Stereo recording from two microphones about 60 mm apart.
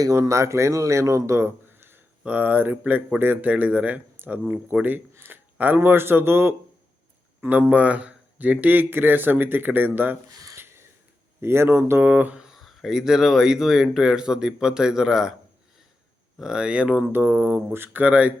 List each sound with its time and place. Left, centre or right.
0.2 s speech: right
2.2 s a man's voice: right
3.5 s a man's voice: right
7.7 s speech: right
10.2 s a sound: right
10.6 s a sound: right
11.3 s speech: right
12.0 s a man's voice: right
12.5 s speech: centre
16.4 s speech: centre
17.1 s speech: right
18.0 s a man's voice: right